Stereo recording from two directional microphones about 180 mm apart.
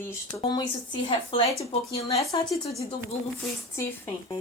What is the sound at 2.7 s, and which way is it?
Speech, 35° left (ahead or behind).